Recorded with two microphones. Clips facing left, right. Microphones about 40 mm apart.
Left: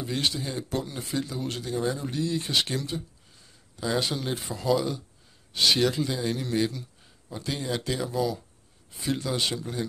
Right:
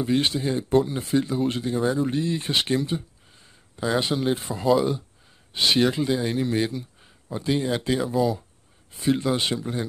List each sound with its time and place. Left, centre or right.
0.0 s speech: right
2.7 s a sound: right
3.9 s speech: centre